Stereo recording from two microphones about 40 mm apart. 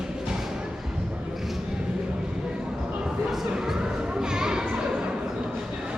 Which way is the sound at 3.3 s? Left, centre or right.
Centre.